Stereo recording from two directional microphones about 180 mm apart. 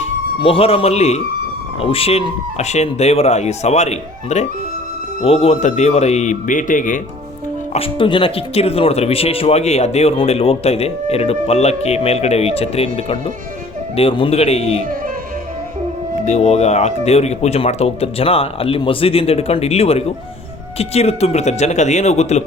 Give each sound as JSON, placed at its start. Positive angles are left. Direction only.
{"t": 0.0, "sound": "speech", "side_deg": 30}
{"t": 7.7, "sound": "speech", "side_deg": 30}
{"t": 16.2, "sound": "speech", "side_deg": 40}